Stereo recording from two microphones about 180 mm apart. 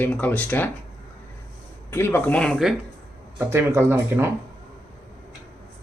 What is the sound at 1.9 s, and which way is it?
Speech, 15° left (ahead or behind).